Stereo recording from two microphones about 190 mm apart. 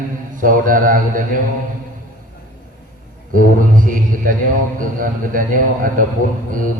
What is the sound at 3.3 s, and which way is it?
A man's voice, 45° right (ahead or behind).